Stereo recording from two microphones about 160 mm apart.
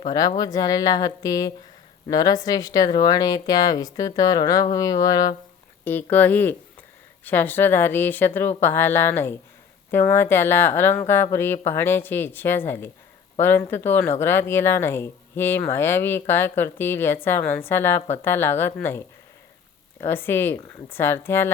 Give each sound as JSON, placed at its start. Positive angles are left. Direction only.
{"t": 0.3, "sound": "speech", "side_deg": 25}
{"t": 5.8, "sound": "speech", "side_deg": 10}